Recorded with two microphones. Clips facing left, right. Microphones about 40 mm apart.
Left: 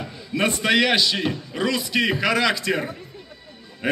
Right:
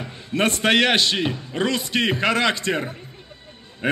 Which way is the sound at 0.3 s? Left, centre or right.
Right.